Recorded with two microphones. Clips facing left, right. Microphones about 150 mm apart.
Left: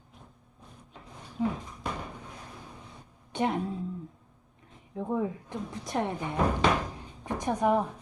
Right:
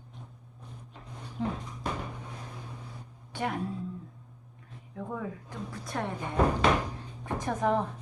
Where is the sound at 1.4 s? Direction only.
5° left (ahead or behind).